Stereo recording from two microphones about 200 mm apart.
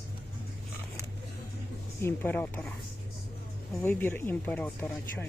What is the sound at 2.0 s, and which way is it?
Speech, 10° left (ahead or behind).